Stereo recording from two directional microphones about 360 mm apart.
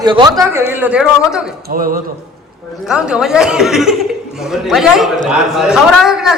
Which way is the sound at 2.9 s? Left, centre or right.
Centre.